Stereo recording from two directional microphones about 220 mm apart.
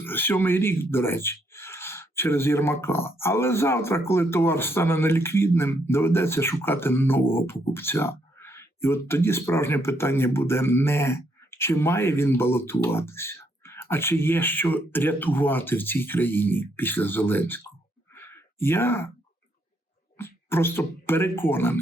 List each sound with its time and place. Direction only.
0.0 s speech: 10° left (ahead or behind)
18.1 s a sound: 10° left (ahead or behind)
20.1 s speech: 10° left (ahead or behind)